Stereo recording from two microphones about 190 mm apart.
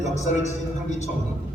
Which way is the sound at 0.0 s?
35° left (ahead or behind).